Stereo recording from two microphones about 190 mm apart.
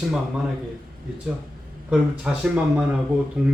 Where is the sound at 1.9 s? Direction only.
5° right (ahead or behind).